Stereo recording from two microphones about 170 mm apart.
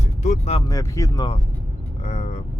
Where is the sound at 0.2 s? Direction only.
40° left (ahead or behind).